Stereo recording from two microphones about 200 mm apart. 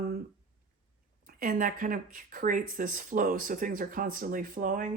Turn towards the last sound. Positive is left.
turn(degrees=-40)  # may be behind; listen again after turning